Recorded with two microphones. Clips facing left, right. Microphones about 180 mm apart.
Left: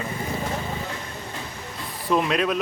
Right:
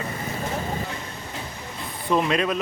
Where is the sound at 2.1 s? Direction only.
Centre (ahead or behind).